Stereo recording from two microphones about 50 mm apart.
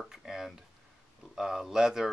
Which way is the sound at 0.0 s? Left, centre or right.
Centre.